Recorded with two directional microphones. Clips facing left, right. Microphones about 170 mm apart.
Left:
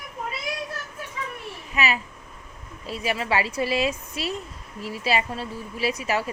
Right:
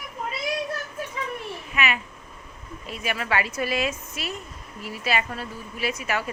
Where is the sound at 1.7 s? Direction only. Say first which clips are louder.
Left 2 dB; 35° left (ahead or behind).